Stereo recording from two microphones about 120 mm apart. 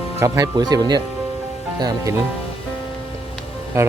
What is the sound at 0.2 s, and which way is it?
Speech, 30° right (ahead or behind).